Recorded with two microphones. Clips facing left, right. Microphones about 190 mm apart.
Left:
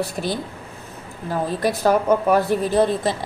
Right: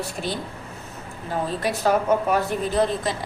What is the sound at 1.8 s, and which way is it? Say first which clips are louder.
Speech: left 3 dB; 40° left (ahead or behind).